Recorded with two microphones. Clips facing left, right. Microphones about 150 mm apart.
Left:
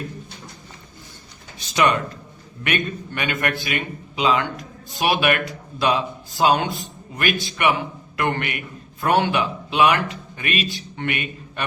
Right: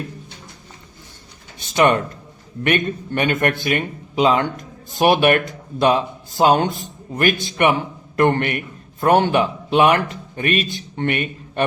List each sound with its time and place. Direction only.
1.5 s a man's voice: 50° right (ahead or behind)